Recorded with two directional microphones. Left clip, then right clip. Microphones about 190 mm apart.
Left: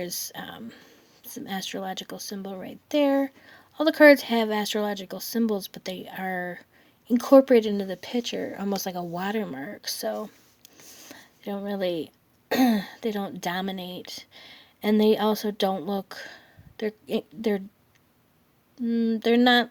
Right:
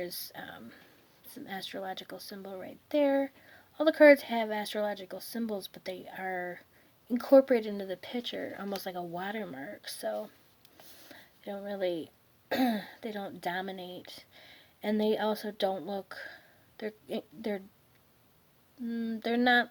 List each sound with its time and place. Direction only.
0.0 s speech: 30° left (ahead or behind)
18.9 s speech: 30° left (ahead or behind)